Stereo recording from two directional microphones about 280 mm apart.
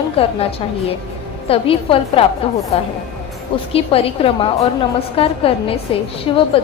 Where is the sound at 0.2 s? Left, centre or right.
Centre.